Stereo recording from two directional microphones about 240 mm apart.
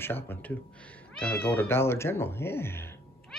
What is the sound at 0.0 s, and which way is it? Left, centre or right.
Speech, centre.